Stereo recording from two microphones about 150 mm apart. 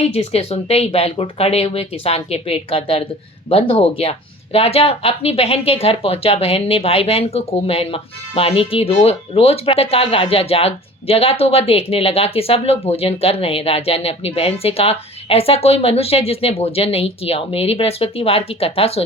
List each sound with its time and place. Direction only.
0.0 s speech: 45° left (ahead or behind)